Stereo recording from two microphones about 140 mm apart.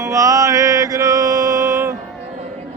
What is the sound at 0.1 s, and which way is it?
Mantra, 25° right (ahead or behind).